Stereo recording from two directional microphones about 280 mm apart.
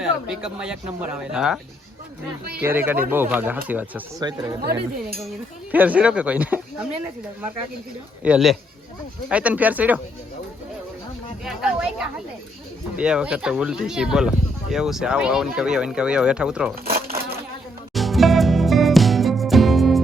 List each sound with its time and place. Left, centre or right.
0.0 s speech: centre
2.6 s speech: centre
4.6 s speech: right
5.7 s speech: centre
8.2 s speech: centre
11.4 s speech: centre
17.9 s music: centre